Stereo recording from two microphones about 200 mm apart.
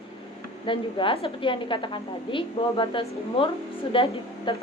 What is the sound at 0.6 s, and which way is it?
A woman's voice, 25° left (ahead or behind).